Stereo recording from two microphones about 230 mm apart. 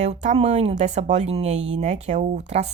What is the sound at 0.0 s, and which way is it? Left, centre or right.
Speech, right.